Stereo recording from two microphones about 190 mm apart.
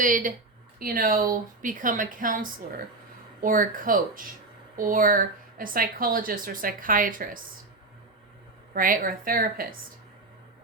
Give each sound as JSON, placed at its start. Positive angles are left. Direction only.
{"t": 0.0, "sound": "speech", "side_deg": -45}
{"t": 8.7, "sound": "speech", "side_deg": -45}